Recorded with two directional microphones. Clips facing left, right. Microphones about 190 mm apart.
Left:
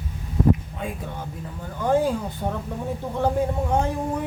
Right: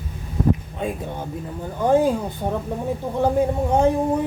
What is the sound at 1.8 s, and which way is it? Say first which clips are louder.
Speech: right 4 dB; 15° right (ahead or behind).